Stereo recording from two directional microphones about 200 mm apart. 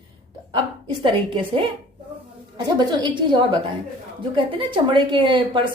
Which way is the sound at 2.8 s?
20° right (ahead or behind).